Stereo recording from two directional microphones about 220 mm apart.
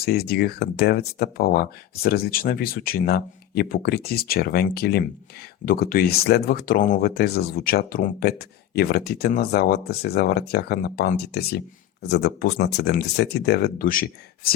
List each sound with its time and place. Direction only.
0.0 s speech: 45° left (ahead or behind)